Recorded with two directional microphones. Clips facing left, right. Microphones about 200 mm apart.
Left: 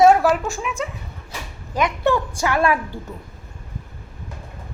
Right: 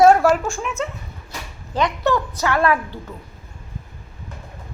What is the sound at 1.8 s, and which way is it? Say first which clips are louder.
A woman's voice: even; 15° left (ahead or behind).